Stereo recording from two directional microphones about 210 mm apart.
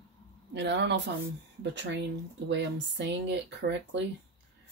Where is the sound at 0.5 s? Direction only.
55° right (ahead or behind).